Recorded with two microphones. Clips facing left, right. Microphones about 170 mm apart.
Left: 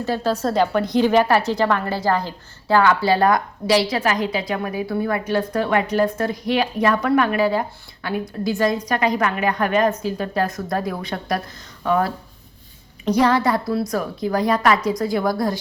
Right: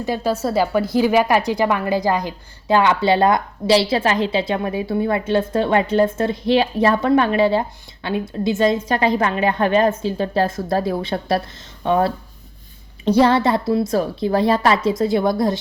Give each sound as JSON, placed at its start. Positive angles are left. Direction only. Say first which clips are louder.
{"t": 0.0, "sound": "a woman's voice", "louder": "right 1 dB", "side_deg": -10}